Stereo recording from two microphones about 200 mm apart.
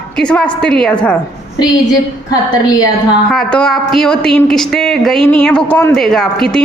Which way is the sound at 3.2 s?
Centre (ahead or behind).